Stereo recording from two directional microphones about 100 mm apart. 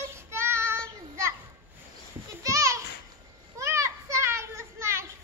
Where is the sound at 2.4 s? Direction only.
30° right (ahead or behind).